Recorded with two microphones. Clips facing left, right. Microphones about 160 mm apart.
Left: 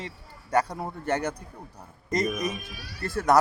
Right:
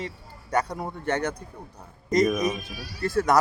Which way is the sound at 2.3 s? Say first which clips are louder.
Right 5 dB; 65° right (ahead or behind).